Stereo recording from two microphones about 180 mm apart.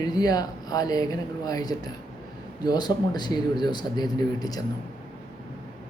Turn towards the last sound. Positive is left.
turn(degrees=20)  # may be behind; listen again after turning